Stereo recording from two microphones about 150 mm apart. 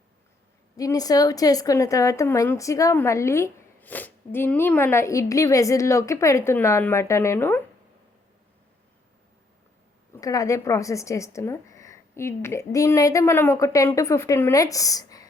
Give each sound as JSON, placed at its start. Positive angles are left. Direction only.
{"t": 0.8, "sound": "a woman's voice", "side_deg": 25}
{"t": 10.2, "sound": "a woman's voice", "side_deg": 20}